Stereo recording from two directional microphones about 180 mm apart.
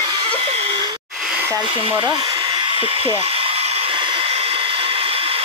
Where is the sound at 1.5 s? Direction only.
25° right (ahead or behind).